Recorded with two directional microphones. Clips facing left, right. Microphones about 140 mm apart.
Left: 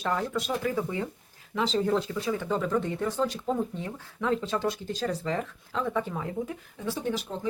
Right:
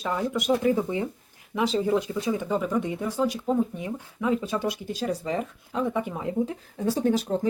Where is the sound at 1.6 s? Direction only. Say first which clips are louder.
Right 2 dB; 10° right (ahead or behind).